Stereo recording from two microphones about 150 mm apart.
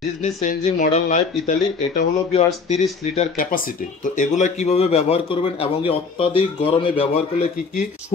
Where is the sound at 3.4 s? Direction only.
70° left (ahead or behind); by 7.5 s 40° left (ahead or behind).